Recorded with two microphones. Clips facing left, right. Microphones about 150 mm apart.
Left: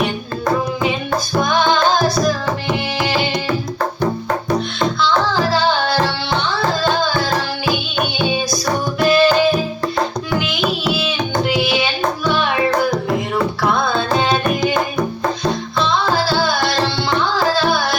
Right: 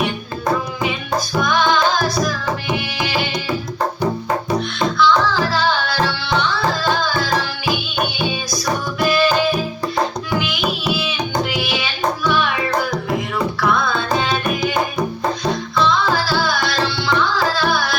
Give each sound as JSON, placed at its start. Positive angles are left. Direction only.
{"t": 1.4, "sound": "music", "side_deg": 25}
{"t": 4.9, "sound": "music", "side_deg": 25}
{"t": 9.0, "sound": "music", "side_deg": 25}
{"t": 10.9, "sound": "music", "side_deg": 25}
{"t": 15.8, "sound": "music", "side_deg": 25}